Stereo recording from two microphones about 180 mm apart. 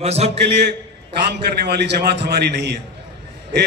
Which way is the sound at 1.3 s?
65° right (ahead or behind).